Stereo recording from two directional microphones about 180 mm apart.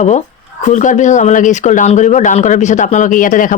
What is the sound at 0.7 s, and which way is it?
Speech, 45° left (ahead or behind).